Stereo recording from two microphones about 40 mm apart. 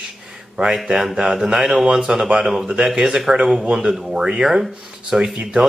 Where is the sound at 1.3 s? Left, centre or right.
Centre.